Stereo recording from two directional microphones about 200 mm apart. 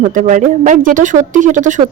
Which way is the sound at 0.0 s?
35° right (ahead or behind).